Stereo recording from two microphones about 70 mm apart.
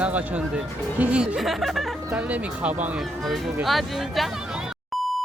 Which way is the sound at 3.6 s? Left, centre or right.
Centre.